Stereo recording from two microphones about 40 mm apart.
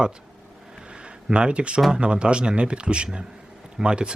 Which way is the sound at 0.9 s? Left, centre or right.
Right.